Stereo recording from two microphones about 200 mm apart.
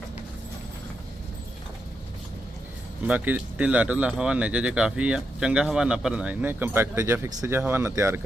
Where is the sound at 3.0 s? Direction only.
10° right (ahead or behind).